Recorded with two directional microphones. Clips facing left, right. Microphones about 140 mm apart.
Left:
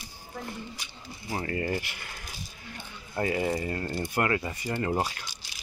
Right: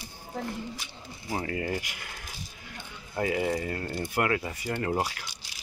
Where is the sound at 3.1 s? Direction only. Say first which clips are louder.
Even; 5° right (ahead or behind).